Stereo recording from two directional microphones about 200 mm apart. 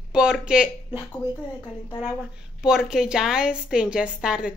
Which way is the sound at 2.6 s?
Centre (ahead or behind).